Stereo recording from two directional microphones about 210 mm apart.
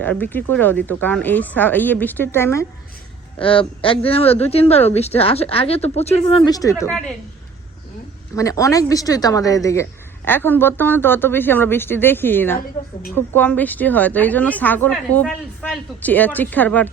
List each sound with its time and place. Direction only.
0.0 s speech: 10° left (ahead or behind)
3.3 s speech: 25° left (ahead or behind)
6.7 s a woman's voice: centre (ahead or behind)
8.4 s speech: 15° left (ahead or behind)